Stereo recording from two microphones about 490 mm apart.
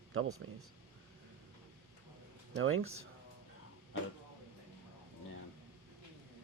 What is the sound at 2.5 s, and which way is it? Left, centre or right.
Speech, right.